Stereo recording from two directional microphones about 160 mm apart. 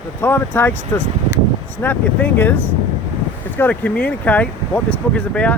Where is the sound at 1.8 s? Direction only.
10° left (ahead or behind).